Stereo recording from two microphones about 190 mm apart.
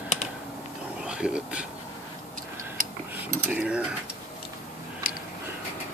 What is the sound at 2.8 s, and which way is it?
Dishes, 45° right (ahead or behind).